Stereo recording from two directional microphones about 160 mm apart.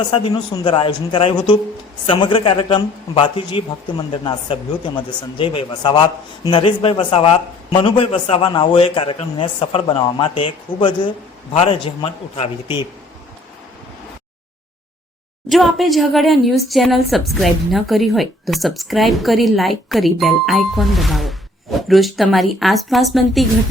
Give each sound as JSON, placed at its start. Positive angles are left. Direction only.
{"t": 0.1, "sound": "a man's voice", "side_deg": 35}
{"t": 15.4, "sound": "a woman's voice", "side_deg": 0}